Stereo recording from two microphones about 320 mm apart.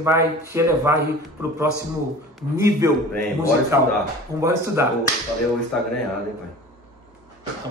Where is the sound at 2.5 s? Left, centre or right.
Centre.